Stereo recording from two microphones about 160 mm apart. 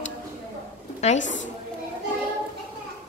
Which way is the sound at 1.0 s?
45° left (ahead or behind).